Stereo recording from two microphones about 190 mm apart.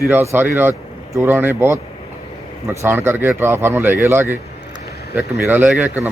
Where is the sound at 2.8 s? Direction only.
10° right (ahead or behind).